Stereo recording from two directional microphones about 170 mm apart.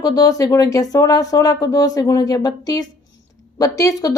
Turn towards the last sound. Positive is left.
turn(degrees=20)  # may be behind; listen again after turning